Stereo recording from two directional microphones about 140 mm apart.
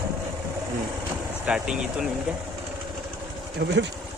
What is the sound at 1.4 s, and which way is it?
Speech, 5° right (ahead or behind).